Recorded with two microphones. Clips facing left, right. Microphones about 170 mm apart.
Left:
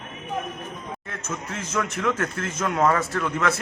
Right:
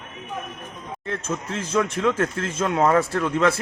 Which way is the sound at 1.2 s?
30° right (ahead or behind).